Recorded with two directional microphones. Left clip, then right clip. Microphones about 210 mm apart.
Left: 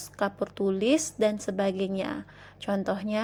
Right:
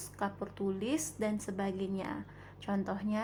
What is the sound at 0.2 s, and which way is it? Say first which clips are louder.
A woman's voice: left 9 dB; 20° left (ahead or behind).